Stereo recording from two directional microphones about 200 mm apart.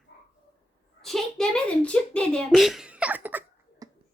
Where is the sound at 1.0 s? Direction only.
Centre (ahead or behind).